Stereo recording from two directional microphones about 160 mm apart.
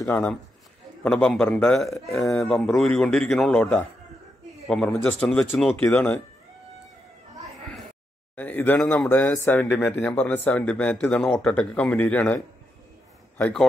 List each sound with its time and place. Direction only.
0.0 s a man's voice: 15° left (ahead or behind)
8.4 s speech: 10° left (ahead or behind)
13.4 s a man's voice: 5° left (ahead or behind)